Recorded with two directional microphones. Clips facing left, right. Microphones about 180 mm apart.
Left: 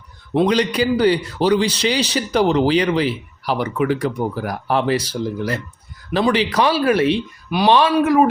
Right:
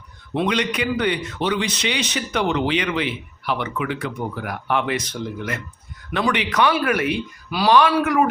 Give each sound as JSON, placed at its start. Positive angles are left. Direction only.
{"t": 0.3, "sound": "a man's voice", "side_deg": 35}